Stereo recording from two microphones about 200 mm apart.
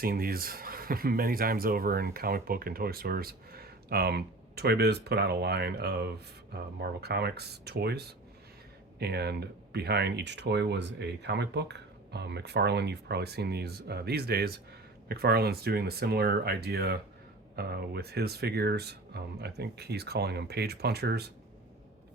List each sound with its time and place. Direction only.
0.0 s speech: 45° right (ahead or behind)